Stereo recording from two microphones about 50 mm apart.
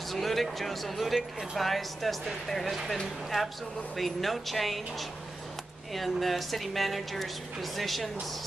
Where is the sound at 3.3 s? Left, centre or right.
Centre.